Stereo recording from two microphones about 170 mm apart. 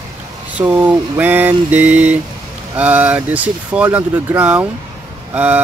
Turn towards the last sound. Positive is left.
turn(degrees=-10)  # may be behind; listen again after turning